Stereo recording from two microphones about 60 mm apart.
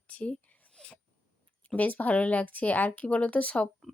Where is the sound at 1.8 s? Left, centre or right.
Left.